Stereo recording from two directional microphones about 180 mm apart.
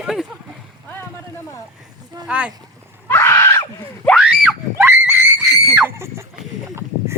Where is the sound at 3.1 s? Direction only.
15° left (ahead or behind).